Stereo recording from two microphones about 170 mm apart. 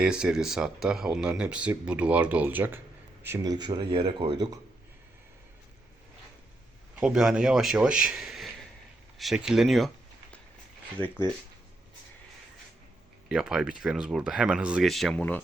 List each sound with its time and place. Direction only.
0.0 s speech: 5° right (ahead or behind)
3.2 s speech: 20° right (ahead or behind)
7.0 s speech: 5° right (ahead or behind)
13.2 s speech: 5° right (ahead or behind)